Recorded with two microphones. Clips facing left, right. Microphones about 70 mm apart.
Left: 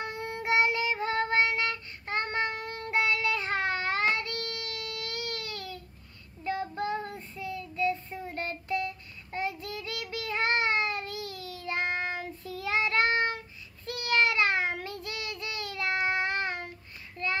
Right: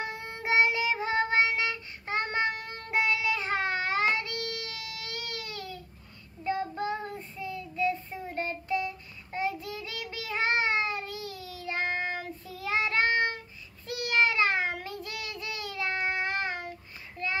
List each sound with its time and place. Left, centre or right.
0.0 s child singing: centre